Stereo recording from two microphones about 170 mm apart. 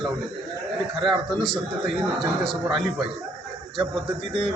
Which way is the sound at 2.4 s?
Centre (ahead or behind).